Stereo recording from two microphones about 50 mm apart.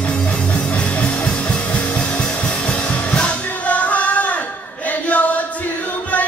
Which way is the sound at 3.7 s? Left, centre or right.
Left.